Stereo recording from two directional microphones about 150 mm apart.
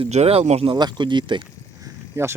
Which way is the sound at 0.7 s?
30° right (ahead or behind).